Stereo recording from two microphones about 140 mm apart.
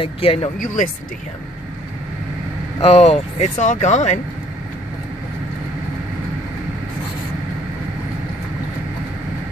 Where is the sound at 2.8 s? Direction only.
45° left (ahead or behind).